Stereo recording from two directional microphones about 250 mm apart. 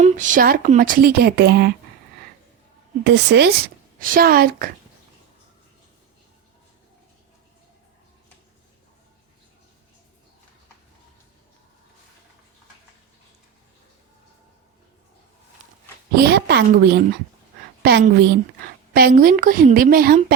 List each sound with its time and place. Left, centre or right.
0.0 s speech: right
3.0 s a woman's voice: right
16.1 s speech: right